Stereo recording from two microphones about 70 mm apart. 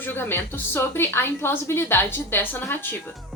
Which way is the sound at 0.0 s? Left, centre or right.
Left.